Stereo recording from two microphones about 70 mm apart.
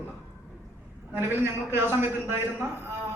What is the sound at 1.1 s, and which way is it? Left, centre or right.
Speech, right.